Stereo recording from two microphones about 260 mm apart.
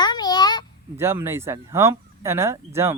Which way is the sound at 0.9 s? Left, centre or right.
Centre.